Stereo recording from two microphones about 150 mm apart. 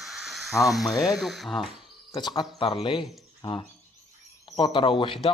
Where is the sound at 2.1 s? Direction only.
25° left (ahead or behind).